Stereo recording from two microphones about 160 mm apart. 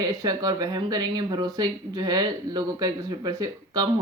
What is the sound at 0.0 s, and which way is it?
Speech, 25° right (ahead or behind).